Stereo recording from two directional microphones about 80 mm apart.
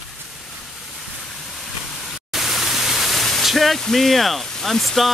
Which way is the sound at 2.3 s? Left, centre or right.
Centre.